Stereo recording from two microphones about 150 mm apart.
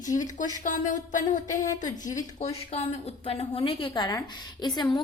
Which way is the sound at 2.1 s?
45° left (ahead or behind).